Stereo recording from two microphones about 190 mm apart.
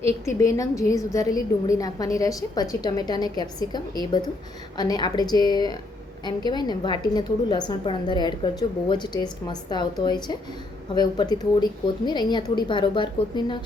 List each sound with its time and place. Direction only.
0.3 s a woman's voice: 15° left (ahead or behind)